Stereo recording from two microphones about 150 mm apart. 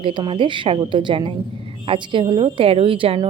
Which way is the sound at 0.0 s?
35° right (ahead or behind).